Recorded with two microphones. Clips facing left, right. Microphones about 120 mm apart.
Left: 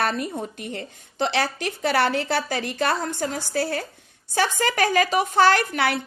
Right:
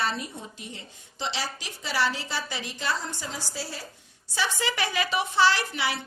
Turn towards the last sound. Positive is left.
turn(degrees=55)  # may be behind; listen again after turning